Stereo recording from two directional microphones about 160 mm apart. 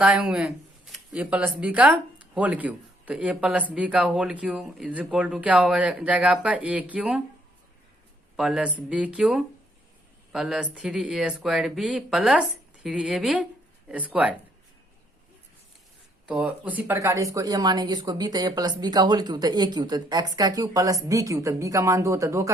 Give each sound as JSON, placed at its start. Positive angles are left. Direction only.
{"t": 0.0, "sound": "speech", "side_deg": -10}
{"t": 8.4, "sound": "speech", "side_deg": 0}
{"t": 16.2, "sound": "speech", "side_deg": -5}